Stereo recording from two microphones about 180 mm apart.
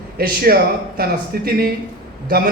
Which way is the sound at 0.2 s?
60° right (ahead or behind).